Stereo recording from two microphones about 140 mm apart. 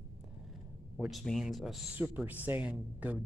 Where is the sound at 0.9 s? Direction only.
Centre (ahead or behind).